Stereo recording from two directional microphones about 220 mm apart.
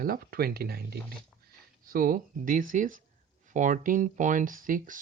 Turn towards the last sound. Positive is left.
turn(degrees=-40)  # may be behind; listen again after turning